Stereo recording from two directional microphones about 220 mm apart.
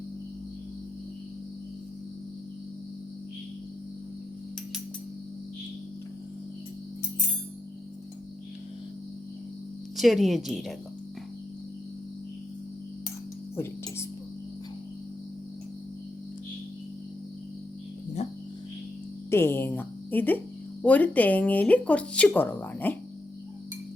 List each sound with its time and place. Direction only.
10.0 s speech: centre (ahead or behind)
18.2 s a sound: 30° left (ahead or behind)
19.3 s a woman's voice: 10° left (ahead or behind)